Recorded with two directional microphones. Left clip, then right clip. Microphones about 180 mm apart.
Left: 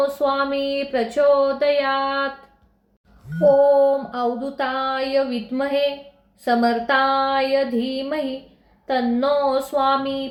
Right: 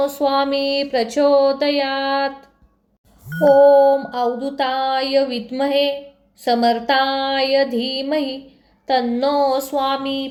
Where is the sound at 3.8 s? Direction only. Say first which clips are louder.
Right 3 dB; 30° right (ahead or behind).